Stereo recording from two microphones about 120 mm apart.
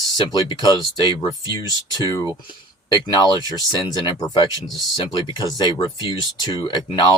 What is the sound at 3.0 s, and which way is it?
Speech, 35° left (ahead or behind).